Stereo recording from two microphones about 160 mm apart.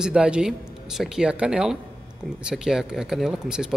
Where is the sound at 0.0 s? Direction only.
5° right (ahead or behind).